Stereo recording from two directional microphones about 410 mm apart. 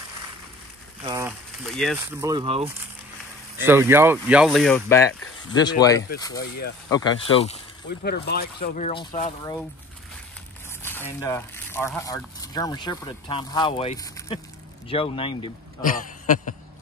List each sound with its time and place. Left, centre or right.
1.0 s speech: centre
8.0 s speech: left
10.8 s speech: centre